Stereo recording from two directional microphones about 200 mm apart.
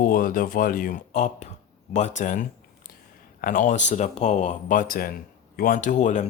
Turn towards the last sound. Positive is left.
turn(degrees=40)  # may be behind; listen again after turning